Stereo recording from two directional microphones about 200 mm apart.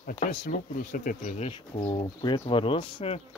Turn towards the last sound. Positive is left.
turn(degrees=25)  # may be behind; listen again after turning